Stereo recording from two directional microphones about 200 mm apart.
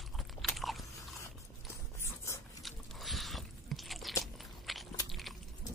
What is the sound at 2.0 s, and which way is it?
Dog, 15° left (ahead or behind).